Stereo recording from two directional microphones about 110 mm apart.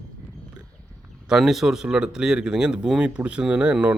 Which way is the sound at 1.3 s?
5° right (ahead or behind).